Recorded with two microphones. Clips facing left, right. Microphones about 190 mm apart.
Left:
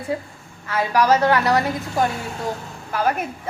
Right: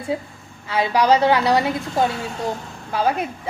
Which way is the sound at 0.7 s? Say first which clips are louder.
Right 1 dB; 15° right (ahead or behind).